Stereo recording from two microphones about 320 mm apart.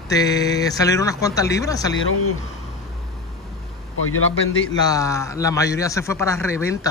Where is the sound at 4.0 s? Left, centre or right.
Left.